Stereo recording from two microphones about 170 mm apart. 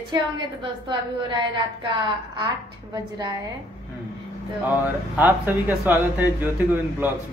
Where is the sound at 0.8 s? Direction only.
25° right (ahead or behind).